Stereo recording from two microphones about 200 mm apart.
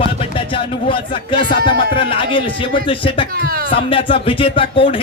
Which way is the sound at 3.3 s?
45° right (ahead or behind).